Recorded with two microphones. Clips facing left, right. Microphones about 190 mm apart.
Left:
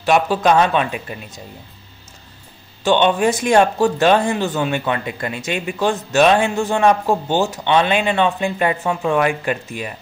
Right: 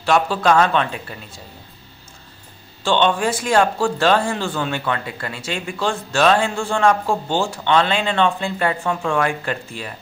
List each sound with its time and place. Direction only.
0.0 s a man's voice: 15° left (ahead or behind)
2.8 s a man's voice: 15° left (ahead or behind)